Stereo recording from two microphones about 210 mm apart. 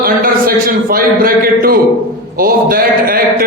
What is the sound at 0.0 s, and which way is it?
A man's voice, 45° right (ahead or behind).